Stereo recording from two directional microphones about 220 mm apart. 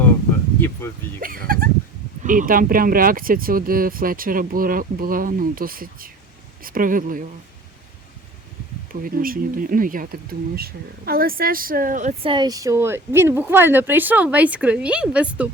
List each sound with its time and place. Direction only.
0.6 s speech: 10° left (ahead or behind)
1.2 s speech: 40° right (ahead or behind)
8.9 s speech: 40° right (ahead or behind); by 15.4 s 5° right (ahead or behind)